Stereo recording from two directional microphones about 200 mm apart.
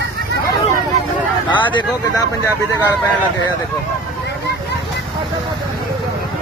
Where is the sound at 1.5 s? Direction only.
25° left (ahead or behind).